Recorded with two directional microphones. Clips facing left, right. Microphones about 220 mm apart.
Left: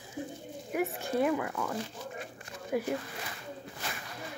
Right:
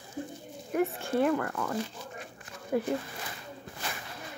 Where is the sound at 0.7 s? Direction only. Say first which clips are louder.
Right 3 dB; 5° left (ahead or behind).